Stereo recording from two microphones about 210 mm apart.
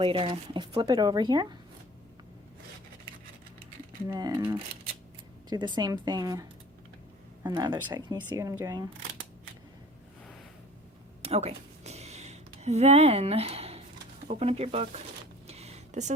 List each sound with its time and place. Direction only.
0.0 s speech: 25° right (ahead or behind)
4.1 s speech: 15° right (ahead or behind)
7.4 s speech: 20° right (ahead or behind)
11.2 s a sound: 30° right (ahead or behind)
14.3 s speech: 30° right (ahead or behind)
15.4 s a sound: 30° right (ahead or behind)